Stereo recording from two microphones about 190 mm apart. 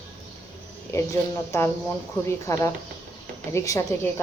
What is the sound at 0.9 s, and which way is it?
Speech, 15° left (ahead or behind).